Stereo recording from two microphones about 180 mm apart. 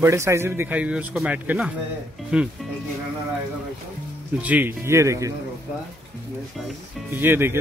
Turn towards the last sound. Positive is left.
turn(degrees=-10)  # may be behind; listen again after turning